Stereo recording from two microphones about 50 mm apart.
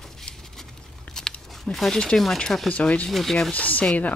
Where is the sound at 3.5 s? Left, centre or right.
Left.